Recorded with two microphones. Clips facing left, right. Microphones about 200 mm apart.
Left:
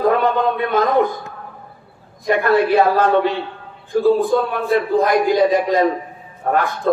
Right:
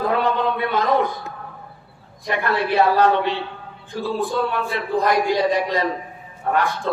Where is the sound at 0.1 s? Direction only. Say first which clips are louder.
Left 3 dB; 50° left (ahead or behind).